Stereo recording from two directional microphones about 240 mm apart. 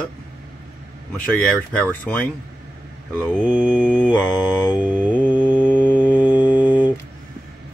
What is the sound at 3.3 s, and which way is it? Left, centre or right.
Speech, centre.